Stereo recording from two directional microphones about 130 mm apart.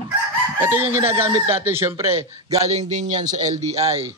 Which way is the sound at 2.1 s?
55° right (ahead or behind).